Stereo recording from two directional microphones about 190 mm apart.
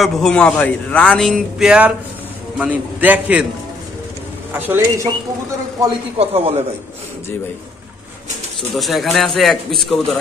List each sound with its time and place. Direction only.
0.0 s a man's voice: 5° left (ahead or behind)
4.6 s a man's voice: 10° right (ahead or behind)
6.1 s a man's voice: 30° right (ahead or behind)
8.7 s speech: centre (ahead or behind)